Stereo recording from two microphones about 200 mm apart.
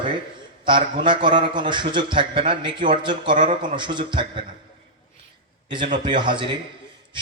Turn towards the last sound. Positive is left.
turn(degrees=-25)  # may be behind; listen again after turning